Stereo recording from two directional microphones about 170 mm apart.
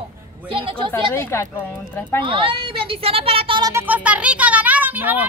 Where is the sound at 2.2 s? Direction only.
30° right (ahead or behind).